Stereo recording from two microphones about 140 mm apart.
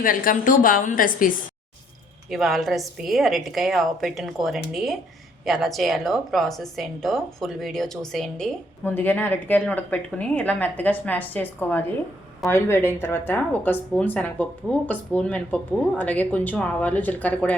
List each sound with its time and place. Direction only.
0.0 s a woman's voice: 80° left
2.3 s a woman's voice: centre (ahead or behind)